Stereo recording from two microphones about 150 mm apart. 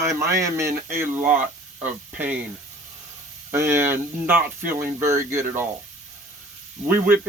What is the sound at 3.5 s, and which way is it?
Speech, 15° right (ahead or behind).